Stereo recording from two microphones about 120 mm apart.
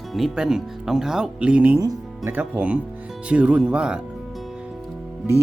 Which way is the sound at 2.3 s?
15° right (ahead or behind).